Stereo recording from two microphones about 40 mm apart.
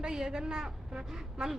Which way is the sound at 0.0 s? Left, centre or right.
Centre.